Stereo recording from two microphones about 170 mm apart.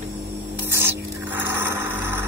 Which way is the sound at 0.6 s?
15° right (ahead or behind).